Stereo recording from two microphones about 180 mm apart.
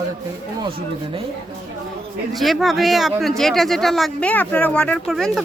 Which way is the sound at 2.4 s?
Centre (ahead or behind).